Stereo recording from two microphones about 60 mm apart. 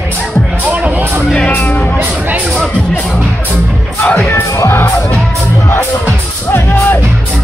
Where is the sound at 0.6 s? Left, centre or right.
Right.